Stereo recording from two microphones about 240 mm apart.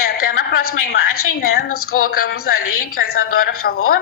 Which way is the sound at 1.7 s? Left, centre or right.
Left.